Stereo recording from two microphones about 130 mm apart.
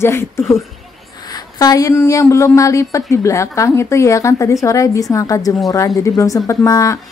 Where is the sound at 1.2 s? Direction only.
30° left (ahead or behind).